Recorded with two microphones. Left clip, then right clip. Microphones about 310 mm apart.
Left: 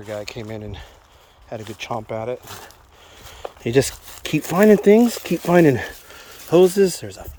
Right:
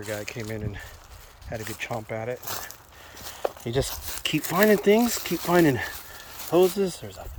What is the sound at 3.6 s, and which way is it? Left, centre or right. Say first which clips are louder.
Speech: left 9 dB; left.